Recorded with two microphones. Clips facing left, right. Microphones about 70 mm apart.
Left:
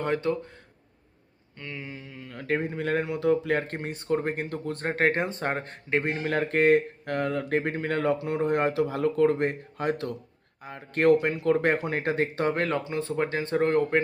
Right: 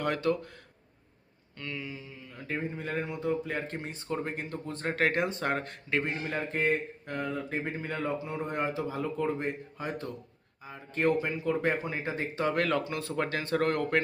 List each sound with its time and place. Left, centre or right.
0.0 s speech: left
1.5 s speech: left
1.9 s speech: left
6.0 s speech: left
12.5 s speech: left